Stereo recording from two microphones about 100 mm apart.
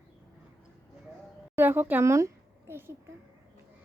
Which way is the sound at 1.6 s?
20° right (ahead or behind).